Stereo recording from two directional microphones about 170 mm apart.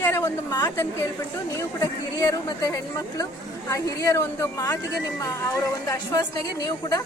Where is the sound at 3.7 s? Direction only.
20° left (ahead or behind).